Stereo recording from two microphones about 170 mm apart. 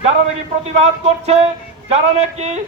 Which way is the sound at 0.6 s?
40° right (ahead or behind).